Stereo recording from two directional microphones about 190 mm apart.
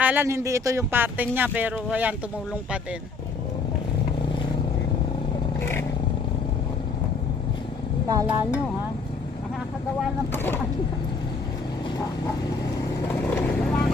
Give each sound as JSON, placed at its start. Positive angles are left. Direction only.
{"t": 0.0, "sound": "speech", "side_deg": -10}
{"t": 5.5, "sound": "vehicle", "side_deg": 10}
{"t": 8.1, "sound": "speech", "side_deg": -20}
{"t": 10.3, "sound": "speech", "side_deg": 10}
{"t": 13.1, "sound": "vehicle", "side_deg": 10}